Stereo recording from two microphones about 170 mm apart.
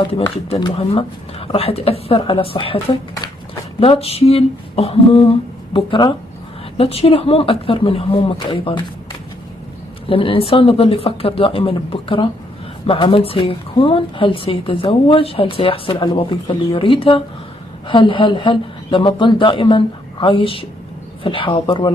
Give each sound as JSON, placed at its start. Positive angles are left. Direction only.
{"t": 0.0, "sound": "a woman's voice", "side_deg": 30}
{"t": 10.0, "sound": "a woman's voice", "side_deg": 30}